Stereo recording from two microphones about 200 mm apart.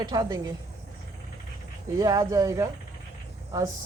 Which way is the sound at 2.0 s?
15° right (ahead or behind).